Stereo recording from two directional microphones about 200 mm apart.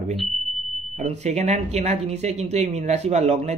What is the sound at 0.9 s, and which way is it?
Speech, 35° right (ahead or behind).